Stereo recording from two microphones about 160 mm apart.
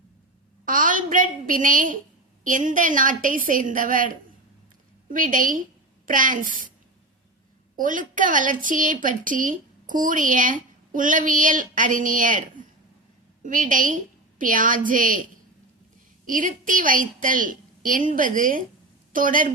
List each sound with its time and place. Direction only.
0.6 s a sound: 60° right (ahead or behind)
2.4 s a woman's voice: 55° right (ahead or behind)
7.8 s a woman's voice: 55° right (ahead or behind)
16.2 s a woman's voice: 55° right (ahead or behind)